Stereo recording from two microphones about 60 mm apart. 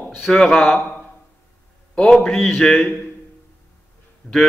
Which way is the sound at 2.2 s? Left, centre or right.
Centre.